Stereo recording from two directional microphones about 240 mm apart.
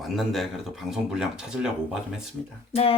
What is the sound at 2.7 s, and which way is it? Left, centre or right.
Music, left.